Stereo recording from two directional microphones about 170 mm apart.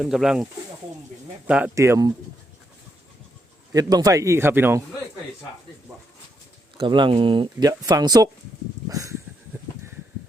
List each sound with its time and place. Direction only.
0.0 s speech: 5° right (ahead or behind)
1.5 s speech: 5° right (ahead or behind)
1.7 s speech: 15° right (ahead or behind)
3.7 s speech: 20° right (ahead or behind)
6.7 s speech: 30° right (ahead or behind)
8.9 s a sound: 20° right (ahead or behind)